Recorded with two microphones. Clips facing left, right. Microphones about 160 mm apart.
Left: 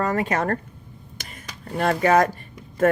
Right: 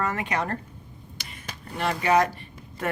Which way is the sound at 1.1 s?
45° left (ahead or behind).